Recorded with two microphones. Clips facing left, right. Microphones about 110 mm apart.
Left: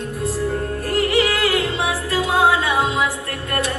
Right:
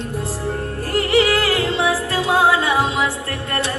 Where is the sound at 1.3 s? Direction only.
30° right (ahead or behind).